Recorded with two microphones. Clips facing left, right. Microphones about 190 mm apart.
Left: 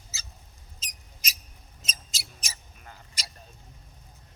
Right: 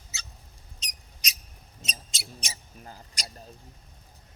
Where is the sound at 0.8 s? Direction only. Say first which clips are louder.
Even; centre (ahead or behind).